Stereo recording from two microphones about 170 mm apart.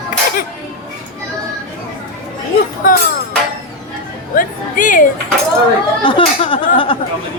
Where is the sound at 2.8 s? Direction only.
55° left (ahead or behind).